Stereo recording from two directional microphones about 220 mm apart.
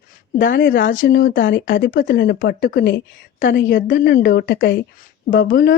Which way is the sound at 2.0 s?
55° left (ahead or behind).